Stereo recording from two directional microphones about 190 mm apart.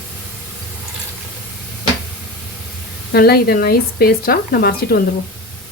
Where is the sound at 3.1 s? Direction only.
55° left (ahead or behind).